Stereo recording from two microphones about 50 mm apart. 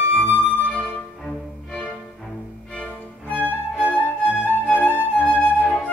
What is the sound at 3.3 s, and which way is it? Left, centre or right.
Music, left.